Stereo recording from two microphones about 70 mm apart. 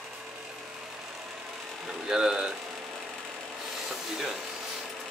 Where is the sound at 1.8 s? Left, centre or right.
Centre.